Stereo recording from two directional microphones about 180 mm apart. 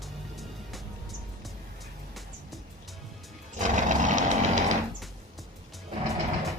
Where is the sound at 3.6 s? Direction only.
45° right (ahead or behind).